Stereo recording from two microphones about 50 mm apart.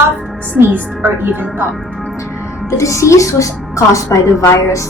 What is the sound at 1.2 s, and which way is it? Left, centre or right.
Speech, right.